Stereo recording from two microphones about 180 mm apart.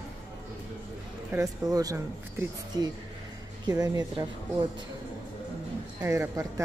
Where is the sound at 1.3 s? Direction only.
20° right (ahead or behind).